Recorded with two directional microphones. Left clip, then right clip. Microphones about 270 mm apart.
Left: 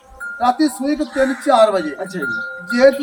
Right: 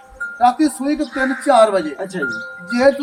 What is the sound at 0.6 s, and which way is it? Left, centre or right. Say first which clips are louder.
A man's voice: even; centre.